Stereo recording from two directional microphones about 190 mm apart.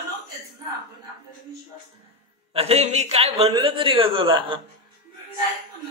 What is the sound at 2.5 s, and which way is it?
Speech, 35° right (ahead or behind).